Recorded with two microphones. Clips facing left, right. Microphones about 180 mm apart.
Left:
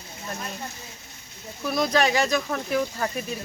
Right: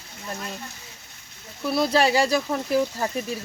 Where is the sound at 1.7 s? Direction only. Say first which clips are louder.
Right 2 dB; 30° right (ahead or behind).